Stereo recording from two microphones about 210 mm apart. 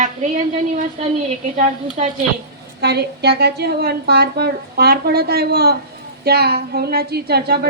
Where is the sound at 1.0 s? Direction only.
30° right (ahead or behind).